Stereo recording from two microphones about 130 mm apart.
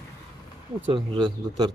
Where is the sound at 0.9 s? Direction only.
35° right (ahead or behind).